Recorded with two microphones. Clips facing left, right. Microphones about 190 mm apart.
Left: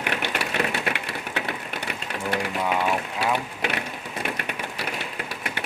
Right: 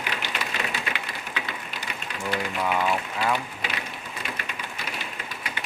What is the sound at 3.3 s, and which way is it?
Speech, 60° left (ahead or behind).